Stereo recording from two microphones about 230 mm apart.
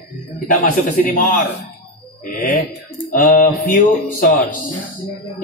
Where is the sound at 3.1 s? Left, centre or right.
Left.